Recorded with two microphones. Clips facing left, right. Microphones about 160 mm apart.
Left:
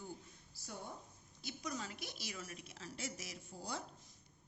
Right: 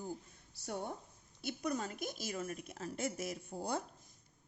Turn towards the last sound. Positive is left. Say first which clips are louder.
# right 7 dB
turn(degrees=-55)  # may be behind; listen again after turning